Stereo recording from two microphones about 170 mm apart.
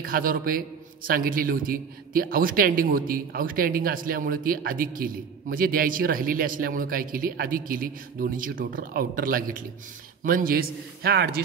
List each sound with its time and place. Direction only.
0.0 s a man's voice: 55° right (ahead or behind)